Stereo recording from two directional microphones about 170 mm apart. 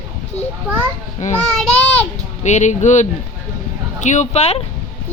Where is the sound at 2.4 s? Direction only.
45° left (ahead or behind).